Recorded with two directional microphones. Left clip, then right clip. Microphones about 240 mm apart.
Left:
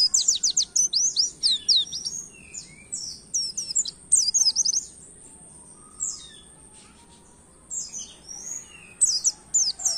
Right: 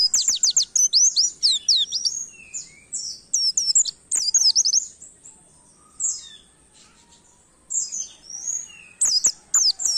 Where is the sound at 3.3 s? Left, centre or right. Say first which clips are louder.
Right 8 dB; right.